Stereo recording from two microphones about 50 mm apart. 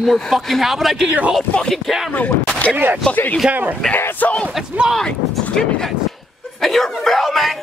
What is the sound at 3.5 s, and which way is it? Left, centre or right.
Speech, right.